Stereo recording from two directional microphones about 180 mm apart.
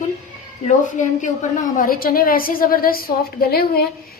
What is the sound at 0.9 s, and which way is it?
A woman's voice, 45° left (ahead or behind).